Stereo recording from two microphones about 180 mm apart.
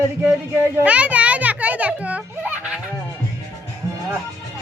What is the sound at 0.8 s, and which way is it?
Children playing, 5° right (ahead or behind).